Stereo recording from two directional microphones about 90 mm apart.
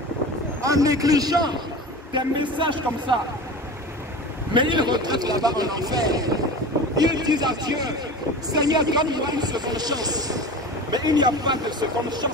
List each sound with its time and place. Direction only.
0.6 s speech: 40° right (ahead or behind)
2.5 s speech: 60° right (ahead or behind)
4.6 s speech: 60° right (ahead or behind)